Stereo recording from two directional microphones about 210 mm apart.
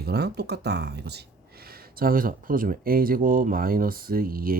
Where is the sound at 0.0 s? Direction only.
50° right (ahead or behind).